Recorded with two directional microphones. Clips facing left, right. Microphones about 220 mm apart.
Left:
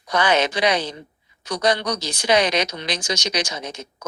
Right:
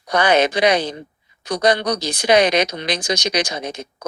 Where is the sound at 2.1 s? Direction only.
60° right (ahead or behind).